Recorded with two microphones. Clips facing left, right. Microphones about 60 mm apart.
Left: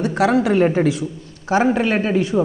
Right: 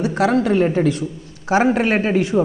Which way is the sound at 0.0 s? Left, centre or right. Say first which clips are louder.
Even; centre.